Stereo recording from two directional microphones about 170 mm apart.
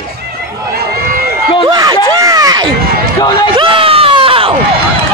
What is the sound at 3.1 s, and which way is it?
Speech, 25° left (ahead or behind).